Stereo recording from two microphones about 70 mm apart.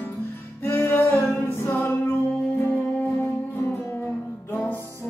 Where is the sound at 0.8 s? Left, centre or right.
Left.